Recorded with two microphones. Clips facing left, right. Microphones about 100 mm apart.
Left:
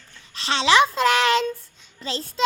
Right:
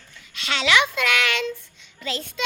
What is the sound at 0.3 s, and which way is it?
A child's voice, 30° left (ahead or behind).